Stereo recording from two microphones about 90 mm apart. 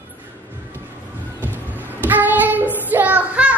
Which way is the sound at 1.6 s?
20° right (ahead or behind).